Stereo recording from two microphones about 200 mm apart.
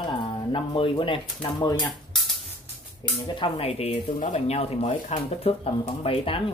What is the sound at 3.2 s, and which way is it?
Speech, 25° left (ahead or behind).